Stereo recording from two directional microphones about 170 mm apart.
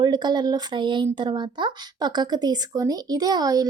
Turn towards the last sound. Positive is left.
turn(degrees=-20)  # may be behind; listen again after turning